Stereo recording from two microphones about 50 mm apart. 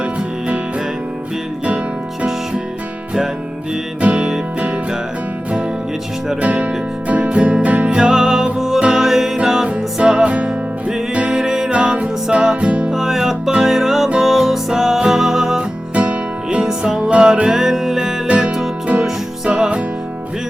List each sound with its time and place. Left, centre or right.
4.0 s music: centre
6.4 s music: right
8.0 s music: centre
11.3 s music: centre
12.9 s music: centre
15.5 s music: right
18.3 s music: right